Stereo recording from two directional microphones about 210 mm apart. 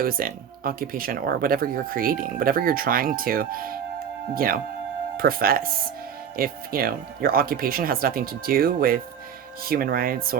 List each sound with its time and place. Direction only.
0.0 s speech: 45° right (ahead or behind)